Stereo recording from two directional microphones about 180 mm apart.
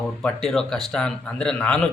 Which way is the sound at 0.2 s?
5° left (ahead or behind).